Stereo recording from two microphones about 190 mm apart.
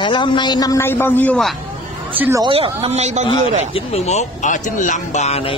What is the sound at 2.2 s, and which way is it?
Speech, 15° right (ahead or behind).